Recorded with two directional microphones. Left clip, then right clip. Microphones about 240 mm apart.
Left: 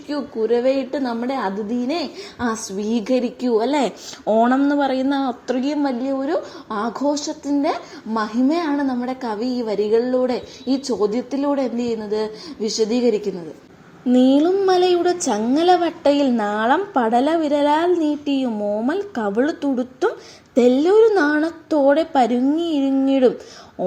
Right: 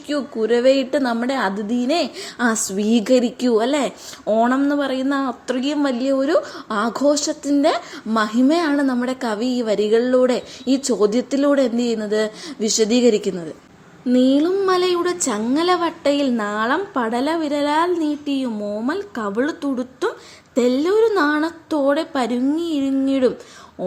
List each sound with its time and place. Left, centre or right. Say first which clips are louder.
0.1 s a woman's voice: right 1 dB; right
2.5 s speech: right 2 dB; right
3.4 s a woman's voice: right 1 dB; right
3.8 s a woman's voice: left 1 dB; centre; by 6.1 s right
6.1 s a woman's voice: right 4 dB; right
14.1 s a woman's voice: left 1 dB; centre